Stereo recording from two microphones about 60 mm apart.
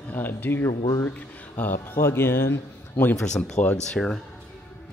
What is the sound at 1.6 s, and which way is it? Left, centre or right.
Speech, left.